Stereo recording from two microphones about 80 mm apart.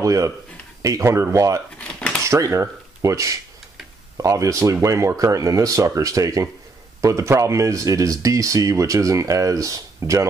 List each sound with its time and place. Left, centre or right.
0.0 s speech: right
1.8 s dishes: centre
2.2 s speech: right